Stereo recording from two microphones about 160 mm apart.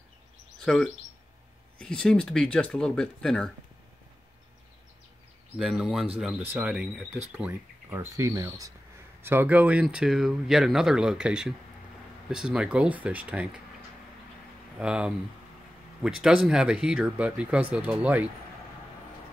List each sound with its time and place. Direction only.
0.6 s speech: 5° left (ahead or behind)
5.6 s speech: 5° right (ahead or behind)
8.0 s speech: 20° right (ahead or behind)
14.8 s speech: 5° right (ahead or behind)